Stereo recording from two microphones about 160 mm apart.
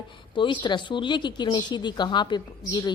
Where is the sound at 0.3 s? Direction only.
30° left (ahead or behind).